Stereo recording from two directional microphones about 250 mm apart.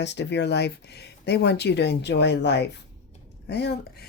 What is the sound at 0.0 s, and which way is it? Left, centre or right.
A woman's voice, left.